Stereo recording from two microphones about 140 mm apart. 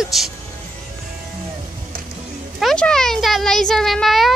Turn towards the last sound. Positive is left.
turn(degrees=0)  # may be behind; listen again after turning